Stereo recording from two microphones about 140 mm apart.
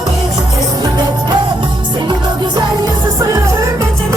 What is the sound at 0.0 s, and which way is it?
Music, 25° right (ahead or behind).